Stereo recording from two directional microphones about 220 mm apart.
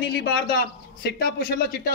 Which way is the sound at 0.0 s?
45° left (ahead or behind).